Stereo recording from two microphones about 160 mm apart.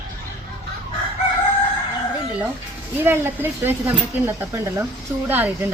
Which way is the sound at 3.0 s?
15° right (ahead or behind).